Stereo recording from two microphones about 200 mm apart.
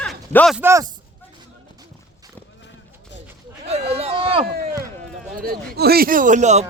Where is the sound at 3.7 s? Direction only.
30° right (ahead or behind).